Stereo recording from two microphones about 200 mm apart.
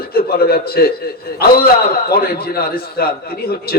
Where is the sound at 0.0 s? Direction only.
50° left (ahead or behind).